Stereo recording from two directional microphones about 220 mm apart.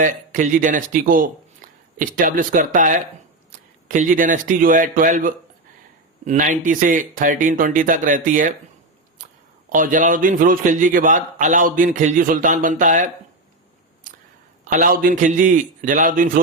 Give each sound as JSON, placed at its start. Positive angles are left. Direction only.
{"t": 0.0, "sound": "a man's voice", "side_deg": -35}
{"t": 9.6, "sound": "a man's voice", "side_deg": -35}
{"t": 14.7, "sound": "a man's voice", "side_deg": -40}